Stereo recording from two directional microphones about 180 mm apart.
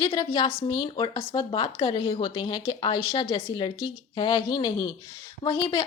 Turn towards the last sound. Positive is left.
turn(degrees=30)  # may be behind; listen again after turning